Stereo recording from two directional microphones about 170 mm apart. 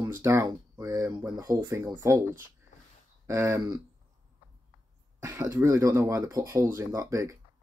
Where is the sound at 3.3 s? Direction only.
15° right (ahead or behind).